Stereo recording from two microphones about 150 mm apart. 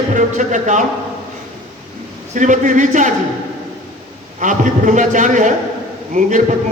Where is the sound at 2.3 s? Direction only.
55° right (ahead or behind).